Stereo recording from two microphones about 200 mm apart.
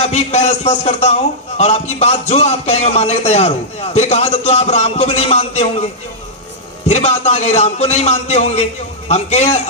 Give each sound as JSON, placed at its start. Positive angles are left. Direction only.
{"t": 0.0, "sound": "a man's voice", "side_deg": 35}